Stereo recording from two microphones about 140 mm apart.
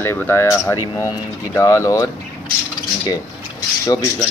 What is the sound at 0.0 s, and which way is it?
Speech, 15° left (ahead or behind).